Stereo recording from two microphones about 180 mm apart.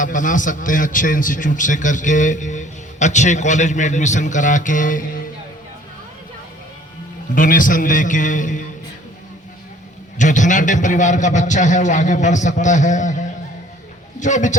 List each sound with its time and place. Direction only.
0.0 s a man's voice: 45° left (ahead or behind)
7.3 s a man's voice: 50° left (ahead or behind)
10.2 s a man's voice: 45° left (ahead or behind)